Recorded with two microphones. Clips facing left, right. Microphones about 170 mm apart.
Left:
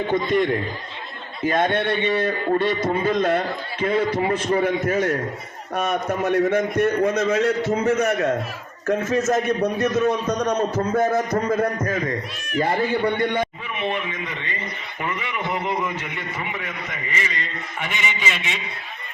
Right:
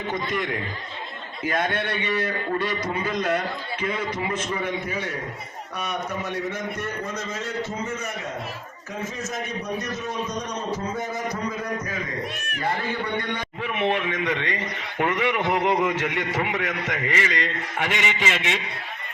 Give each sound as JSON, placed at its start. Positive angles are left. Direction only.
{"t": 0.1, "sound": "a man's voice", "side_deg": 30}
{"t": 8.9, "sound": "a man's voice", "side_deg": 90}
{"t": 13.7, "sound": "a man's voice", "side_deg": -70}